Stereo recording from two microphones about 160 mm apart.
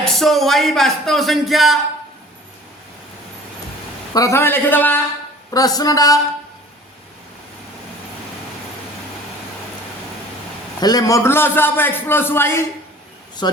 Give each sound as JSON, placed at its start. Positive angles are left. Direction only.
{"t": 0.2, "sound": "speech", "side_deg": 0}
{"t": 4.1, "sound": "a man's voice", "side_deg": 20}
{"t": 5.5, "sound": "a man's voice", "side_deg": 25}
{"t": 10.8, "sound": "a man's voice", "side_deg": 25}
{"t": 13.4, "sound": "a man's voice", "side_deg": 25}